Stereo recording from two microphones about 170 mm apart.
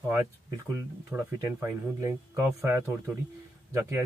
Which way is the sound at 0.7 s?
15° right (ahead or behind).